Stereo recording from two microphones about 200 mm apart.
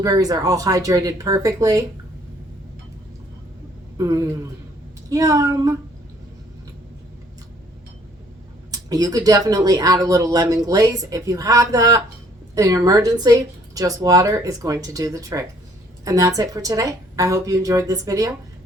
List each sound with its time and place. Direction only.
0.0 s speech: 20° right (ahead or behind)
3.9 s a man's voice: 15° right (ahead or behind)
8.7 s speech: 20° right (ahead or behind)